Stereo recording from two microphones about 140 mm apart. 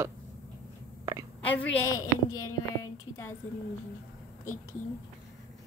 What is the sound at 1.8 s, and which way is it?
Speech, 25° left (ahead or behind).